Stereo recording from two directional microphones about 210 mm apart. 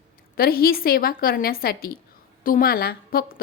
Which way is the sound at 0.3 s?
45° left (ahead or behind).